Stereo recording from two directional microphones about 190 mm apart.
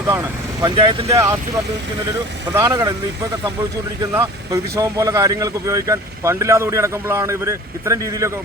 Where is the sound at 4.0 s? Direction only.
15° right (ahead or behind).